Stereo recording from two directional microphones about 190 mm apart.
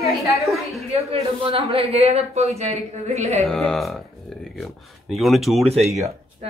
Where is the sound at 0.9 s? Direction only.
30° right (ahead or behind).